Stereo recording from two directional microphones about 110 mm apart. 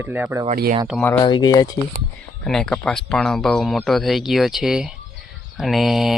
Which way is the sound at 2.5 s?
5° left (ahead or behind).